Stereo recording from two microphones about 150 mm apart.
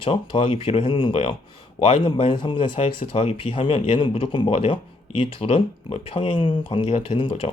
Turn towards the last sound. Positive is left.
turn(degrees=40)  # may be behind; listen again after turning